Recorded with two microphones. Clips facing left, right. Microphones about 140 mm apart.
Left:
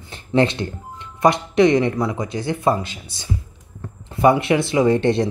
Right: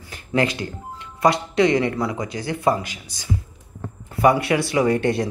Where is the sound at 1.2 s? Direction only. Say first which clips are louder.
Left 3 dB; 20° left (ahead or behind).